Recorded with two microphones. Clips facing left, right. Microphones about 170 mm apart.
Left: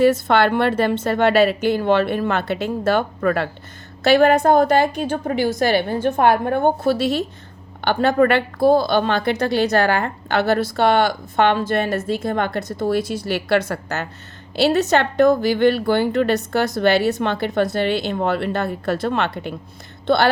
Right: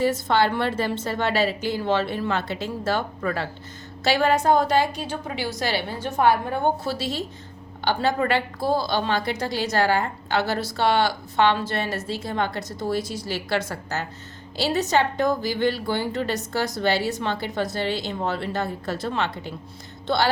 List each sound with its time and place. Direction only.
0.0 s a woman's voice: 65° left (ahead or behind)